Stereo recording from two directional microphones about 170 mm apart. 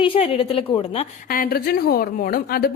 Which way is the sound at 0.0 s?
35° left (ahead or behind).